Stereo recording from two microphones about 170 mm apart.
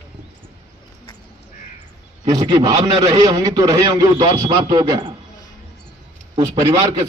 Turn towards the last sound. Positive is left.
turn(degrees=-20)  # may be behind; listen again after turning